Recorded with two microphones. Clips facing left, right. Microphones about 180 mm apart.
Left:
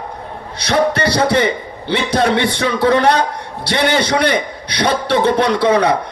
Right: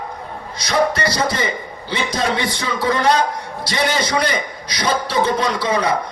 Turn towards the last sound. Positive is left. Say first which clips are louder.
# left 6 dB
turn(degrees=65)  # may be behind; listen again after turning